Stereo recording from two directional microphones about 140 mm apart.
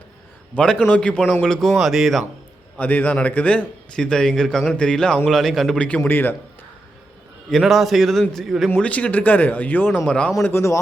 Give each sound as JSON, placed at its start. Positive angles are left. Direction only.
{"t": 0.5, "sound": "a man's voice", "side_deg": 5}
{"t": 2.7, "sound": "a man's voice", "side_deg": 10}
{"t": 7.5, "sound": "a man's voice", "side_deg": 0}